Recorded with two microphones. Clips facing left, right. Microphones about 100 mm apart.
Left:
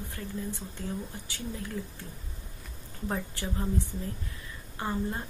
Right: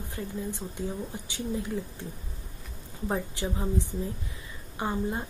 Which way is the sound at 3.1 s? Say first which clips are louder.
Right 3 dB; 15° right (ahead or behind).